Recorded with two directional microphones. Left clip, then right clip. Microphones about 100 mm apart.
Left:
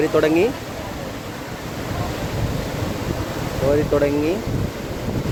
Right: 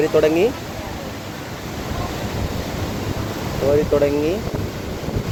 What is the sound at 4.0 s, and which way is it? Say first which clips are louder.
Speech: right 1 dB; 5° left (ahead or behind).